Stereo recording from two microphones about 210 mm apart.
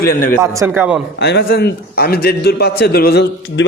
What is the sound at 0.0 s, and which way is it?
Speech, 45° left (ahead or behind).